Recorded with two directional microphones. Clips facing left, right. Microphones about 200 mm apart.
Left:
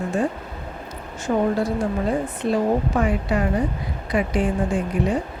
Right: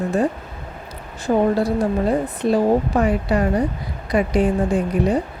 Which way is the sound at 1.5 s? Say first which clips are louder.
Right 3 dB; 35° right (ahead or behind).